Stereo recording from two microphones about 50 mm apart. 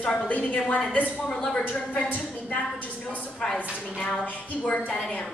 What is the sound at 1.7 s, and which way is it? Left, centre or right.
Speech, left.